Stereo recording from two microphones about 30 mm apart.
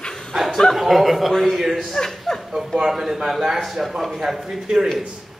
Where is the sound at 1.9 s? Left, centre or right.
Centre.